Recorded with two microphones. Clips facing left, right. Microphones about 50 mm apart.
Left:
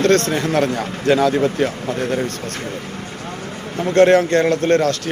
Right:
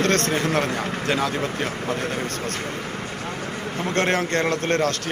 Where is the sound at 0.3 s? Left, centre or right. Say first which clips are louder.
Left 4 dB; centre.